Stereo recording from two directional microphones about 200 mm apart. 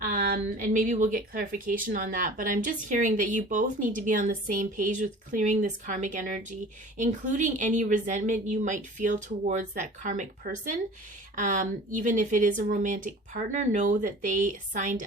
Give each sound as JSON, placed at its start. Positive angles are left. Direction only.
{"t": 0.0, "sound": "speech", "side_deg": -45}